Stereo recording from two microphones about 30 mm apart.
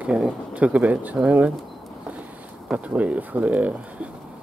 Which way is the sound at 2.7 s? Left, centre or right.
Right.